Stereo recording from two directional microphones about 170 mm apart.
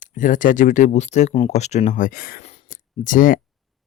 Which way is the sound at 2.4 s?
40° left (ahead or behind).